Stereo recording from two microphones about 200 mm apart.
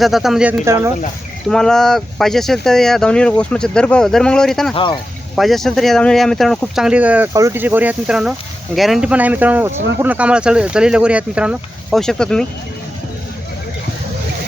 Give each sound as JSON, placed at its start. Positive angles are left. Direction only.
{"t": 0.0, "sound": "speech", "side_deg": 0}
{"t": 1.5, "sound": "speech", "side_deg": 5}
{"t": 4.7, "sound": "speech", "side_deg": 25}
{"t": 5.3, "sound": "speech", "side_deg": 0}